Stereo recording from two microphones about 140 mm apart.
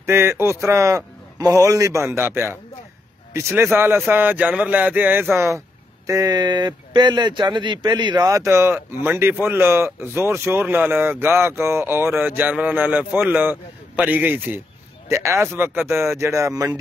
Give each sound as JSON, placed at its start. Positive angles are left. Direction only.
{"t": 0.0, "sound": "a man's voice", "side_deg": -20}